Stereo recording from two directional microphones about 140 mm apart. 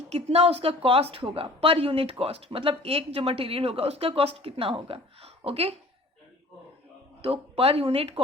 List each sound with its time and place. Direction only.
0.1 s a woman's voice: 45° right (ahead or behind)
7.2 s a woman's voice: 45° right (ahead or behind)